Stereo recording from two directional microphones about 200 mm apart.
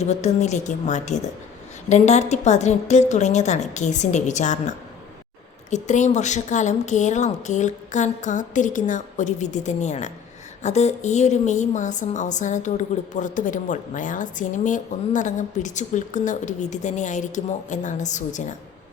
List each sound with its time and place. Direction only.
0.0 s a woman's voice: 35° left (ahead or behind)
5.7 s a woman's voice: 35° left (ahead or behind)